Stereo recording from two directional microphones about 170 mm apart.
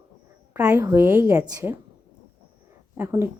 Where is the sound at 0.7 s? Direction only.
15° right (ahead or behind).